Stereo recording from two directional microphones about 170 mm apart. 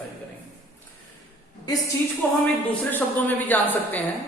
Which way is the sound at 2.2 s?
10° left (ahead or behind).